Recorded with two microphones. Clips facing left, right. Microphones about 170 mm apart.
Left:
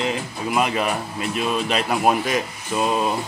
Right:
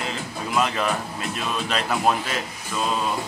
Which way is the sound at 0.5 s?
15° left (ahead or behind).